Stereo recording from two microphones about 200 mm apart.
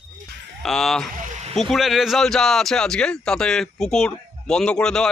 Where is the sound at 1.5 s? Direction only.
Centre (ahead or behind).